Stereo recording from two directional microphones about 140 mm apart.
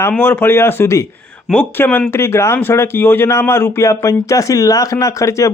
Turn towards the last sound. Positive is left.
turn(degrees=20)  # may be behind; listen again after turning